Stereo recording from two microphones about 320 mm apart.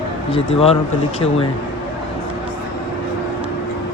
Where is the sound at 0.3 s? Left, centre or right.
Centre.